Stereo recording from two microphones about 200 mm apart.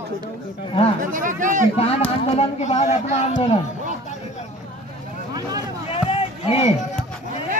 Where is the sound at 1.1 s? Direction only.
40° right (ahead or behind).